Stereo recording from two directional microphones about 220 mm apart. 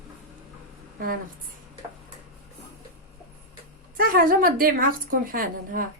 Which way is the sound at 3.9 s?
40° right (ahead or behind).